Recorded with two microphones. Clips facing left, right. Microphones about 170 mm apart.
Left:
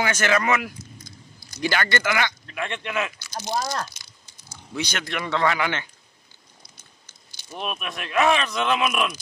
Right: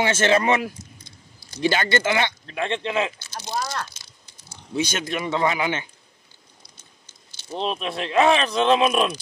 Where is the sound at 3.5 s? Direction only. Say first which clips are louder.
Left 1 dB; 35° left (ahead or behind).